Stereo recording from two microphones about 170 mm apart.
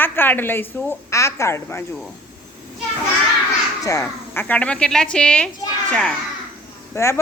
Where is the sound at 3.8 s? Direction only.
20° left (ahead or behind).